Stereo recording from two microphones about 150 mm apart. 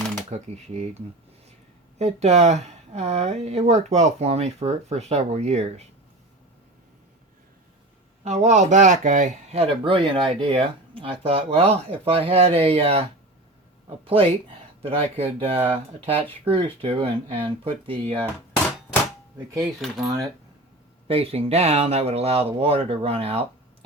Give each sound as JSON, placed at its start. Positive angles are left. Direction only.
{"t": 0.3, "sound": "speech", "side_deg": -45}
{"t": 8.2, "sound": "speech", "side_deg": -50}
{"t": 19.5, "sound": "speech", "side_deg": 0}
{"t": 21.1, "sound": "speech", "side_deg": -40}